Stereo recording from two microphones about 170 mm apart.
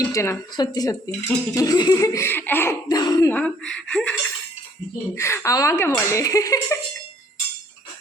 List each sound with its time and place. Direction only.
0.0 s speech: 15° left (ahead or behind)
3.2 s speech: 5° left (ahead or behind)